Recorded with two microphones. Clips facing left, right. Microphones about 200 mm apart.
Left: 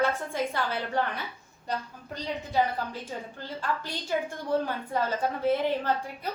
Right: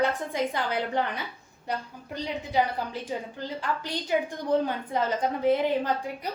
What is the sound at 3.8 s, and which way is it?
A woman's voice, 15° right (ahead or behind).